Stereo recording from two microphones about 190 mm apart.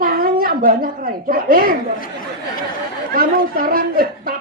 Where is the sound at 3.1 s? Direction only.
50° right (ahead or behind).